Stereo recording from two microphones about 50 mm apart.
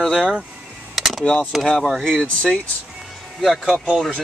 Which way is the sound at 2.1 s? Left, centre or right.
Left.